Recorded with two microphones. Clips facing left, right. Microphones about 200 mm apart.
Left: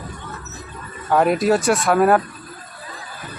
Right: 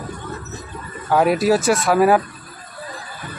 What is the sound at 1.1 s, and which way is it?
Speech, 5° right (ahead or behind).